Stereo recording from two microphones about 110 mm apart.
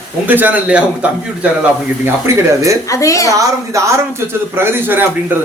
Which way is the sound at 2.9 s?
30° left (ahead or behind).